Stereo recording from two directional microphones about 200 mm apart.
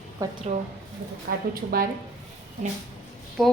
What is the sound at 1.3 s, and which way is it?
Speech, 45° right (ahead or behind).